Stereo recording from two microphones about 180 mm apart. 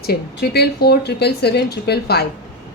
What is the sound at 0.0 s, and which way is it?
A woman's voice, 60° left (ahead or behind).